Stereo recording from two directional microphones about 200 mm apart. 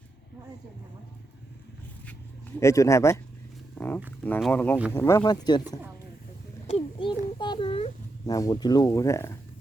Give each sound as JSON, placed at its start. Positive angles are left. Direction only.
{"t": 2.6, "sound": "speech", "side_deg": 15}
{"t": 6.7, "sound": "child singing", "side_deg": 30}
{"t": 8.3, "sound": "speech", "side_deg": 15}